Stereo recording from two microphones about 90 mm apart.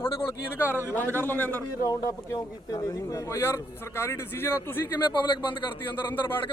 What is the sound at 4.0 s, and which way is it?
Speech, 30° left (ahead or behind).